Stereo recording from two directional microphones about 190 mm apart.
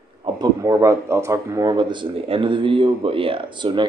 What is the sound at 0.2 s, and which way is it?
Speech, 20° right (ahead or behind).